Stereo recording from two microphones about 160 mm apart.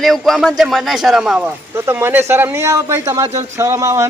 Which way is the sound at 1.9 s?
15° right (ahead or behind).